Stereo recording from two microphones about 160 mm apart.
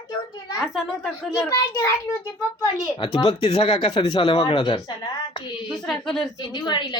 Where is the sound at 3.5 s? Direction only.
35° left (ahead or behind).